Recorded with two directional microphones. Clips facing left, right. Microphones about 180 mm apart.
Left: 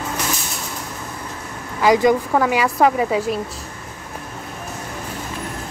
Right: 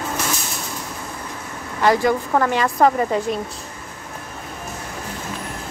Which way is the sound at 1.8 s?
15° left (ahead or behind).